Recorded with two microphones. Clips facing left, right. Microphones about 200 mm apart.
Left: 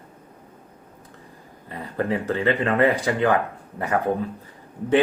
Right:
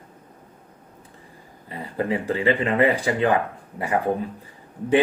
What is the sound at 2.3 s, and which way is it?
Speech, 15° right (ahead or behind).